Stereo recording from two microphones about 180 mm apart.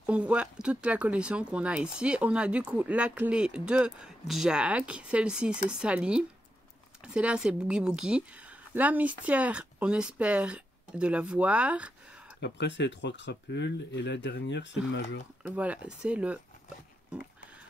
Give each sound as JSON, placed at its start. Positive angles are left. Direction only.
{"t": 0.0, "sound": "a woman's voice", "side_deg": -5}
{"t": 12.4, "sound": "speech", "side_deg": 75}
{"t": 15.4, "sound": "a woman's voice", "side_deg": -10}